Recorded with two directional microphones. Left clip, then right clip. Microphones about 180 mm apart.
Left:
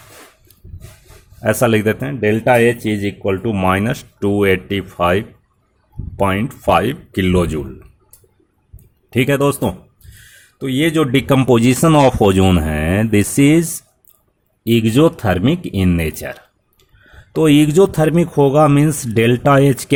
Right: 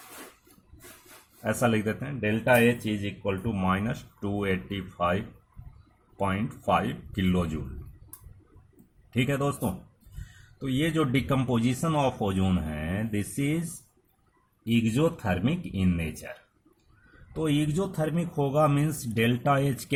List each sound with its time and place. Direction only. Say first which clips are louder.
1.5 s speech: left 12 dB; 45° left (ahead or behind)
9.0 s speech: left 13 dB; 45° left (ahead or behind)
17.3 s speech: left 17 dB; 55° left (ahead or behind)